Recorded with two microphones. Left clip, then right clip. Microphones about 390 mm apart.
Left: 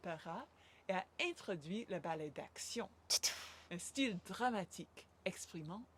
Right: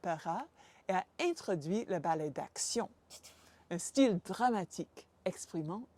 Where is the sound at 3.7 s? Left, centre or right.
Right.